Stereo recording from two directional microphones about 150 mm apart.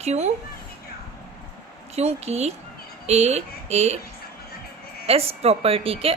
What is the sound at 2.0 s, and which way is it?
A woman's voice, 45° right (ahead or behind).